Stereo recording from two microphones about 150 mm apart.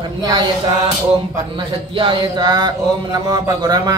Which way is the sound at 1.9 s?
35° right (ahead or behind).